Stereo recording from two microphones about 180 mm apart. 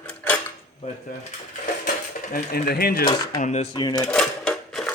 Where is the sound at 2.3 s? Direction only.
60° left (ahead or behind).